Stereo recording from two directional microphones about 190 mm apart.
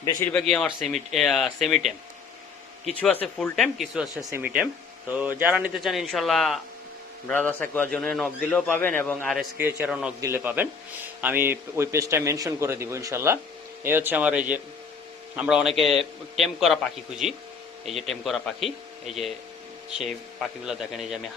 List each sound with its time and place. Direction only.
0.0 s a man's voice: 15° left (ahead or behind)
0.3 s a man's voice: centre (ahead or behind)
20.7 s speech: centre (ahead or behind)